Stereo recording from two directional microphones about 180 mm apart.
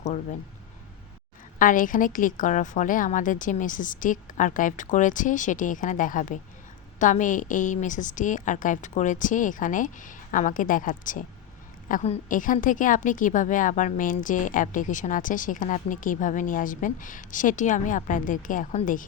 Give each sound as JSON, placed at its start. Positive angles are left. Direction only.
{"t": 0.0, "sound": "speech", "side_deg": 40}
{"t": 1.5, "sound": "a woman's voice", "side_deg": 50}